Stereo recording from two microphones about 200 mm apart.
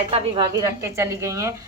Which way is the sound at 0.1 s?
20° right (ahead or behind).